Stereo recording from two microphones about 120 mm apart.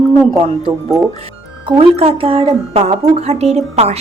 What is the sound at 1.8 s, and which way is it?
Speech, 55° right (ahead or behind).